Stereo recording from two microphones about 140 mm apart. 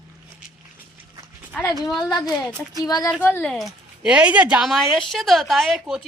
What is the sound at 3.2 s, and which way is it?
Speech, 15° left (ahead or behind).